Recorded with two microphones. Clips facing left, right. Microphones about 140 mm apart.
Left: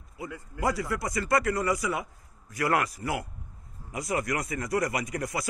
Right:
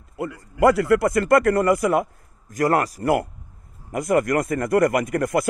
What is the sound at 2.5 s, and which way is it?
A man's voice, 40° right (ahead or behind).